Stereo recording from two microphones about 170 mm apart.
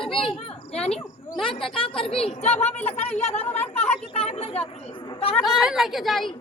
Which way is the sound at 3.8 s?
40° left (ahead or behind).